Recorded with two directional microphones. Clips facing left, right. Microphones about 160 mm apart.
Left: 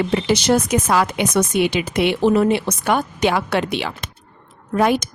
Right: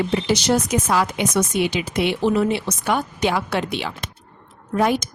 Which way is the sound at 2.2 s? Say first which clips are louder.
Left 5 dB; 50° left (ahead or behind).